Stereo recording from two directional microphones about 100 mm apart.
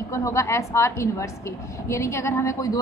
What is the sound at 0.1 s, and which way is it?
A woman's voice, 30° left (ahead or behind).